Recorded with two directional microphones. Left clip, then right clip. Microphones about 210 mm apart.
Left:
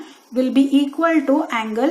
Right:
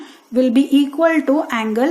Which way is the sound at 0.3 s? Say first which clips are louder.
Right 2 dB; 50° right (ahead or behind).